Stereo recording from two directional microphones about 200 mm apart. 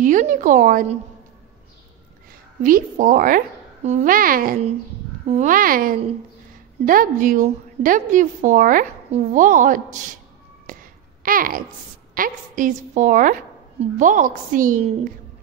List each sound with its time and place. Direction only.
0.0 s a woman's voice: 40° right (ahead or behind)
2.6 s a child's voice: 40° right (ahead or behind)
5.2 s a child's voice: 35° right (ahead or behind)
10.7 s a sound: 45° right (ahead or behind)
12.1 s a woman's voice: 45° right (ahead or behind)